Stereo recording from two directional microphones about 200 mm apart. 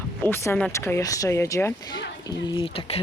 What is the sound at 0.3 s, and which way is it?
Speech, 10° left (ahead or behind).